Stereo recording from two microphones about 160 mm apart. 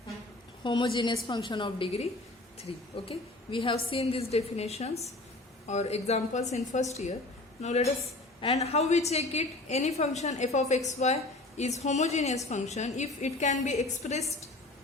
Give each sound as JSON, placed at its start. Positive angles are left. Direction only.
{"t": 0.6, "sound": "a woman's voice", "side_deg": 30}